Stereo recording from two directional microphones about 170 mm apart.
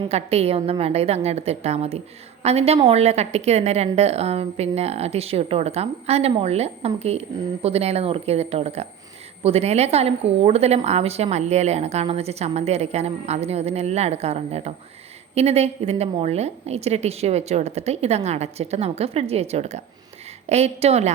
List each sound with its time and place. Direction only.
0.1 s a woman's voice: 40° right (ahead or behind)